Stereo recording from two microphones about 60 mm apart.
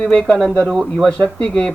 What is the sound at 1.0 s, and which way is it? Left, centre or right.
Speech, centre.